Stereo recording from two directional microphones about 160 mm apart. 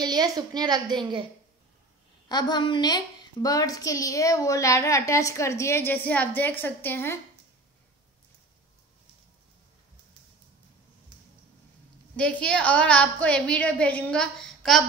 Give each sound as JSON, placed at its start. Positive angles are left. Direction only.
{"t": 0.0, "sound": "a woman's voice", "side_deg": -25}
{"t": 2.2, "sound": "a woman's voice", "side_deg": 25}
{"t": 12.2, "sound": "a woman's voice", "side_deg": 5}